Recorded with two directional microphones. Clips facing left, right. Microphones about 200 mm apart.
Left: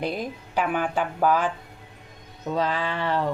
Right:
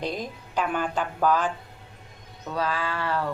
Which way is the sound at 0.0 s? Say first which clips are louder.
Left 2 dB; 10° left (ahead or behind).